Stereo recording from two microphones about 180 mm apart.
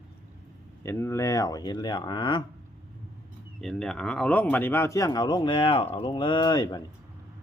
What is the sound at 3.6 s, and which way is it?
Speech, 5° left (ahead or behind).